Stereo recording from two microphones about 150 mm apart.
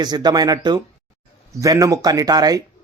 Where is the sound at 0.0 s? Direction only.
25° right (ahead or behind).